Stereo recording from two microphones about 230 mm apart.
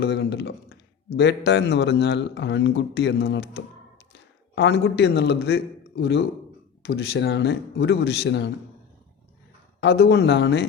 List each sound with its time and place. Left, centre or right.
0.0 s speech: left
9.8 s speech: left